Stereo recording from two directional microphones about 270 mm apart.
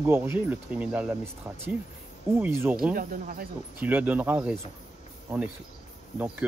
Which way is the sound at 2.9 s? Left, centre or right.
Right.